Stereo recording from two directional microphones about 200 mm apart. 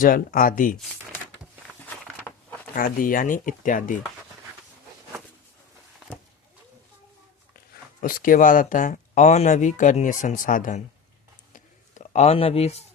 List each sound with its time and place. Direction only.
0.0 s speech: 45° left (ahead or behind)
2.7 s speech: 45° left (ahead or behind)
8.0 s speech: 45° left (ahead or behind)
11.5 s a sound: 35° left (ahead or behind)